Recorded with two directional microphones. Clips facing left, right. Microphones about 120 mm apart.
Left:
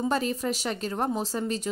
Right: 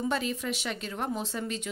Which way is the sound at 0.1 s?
40° left (ahead or behind).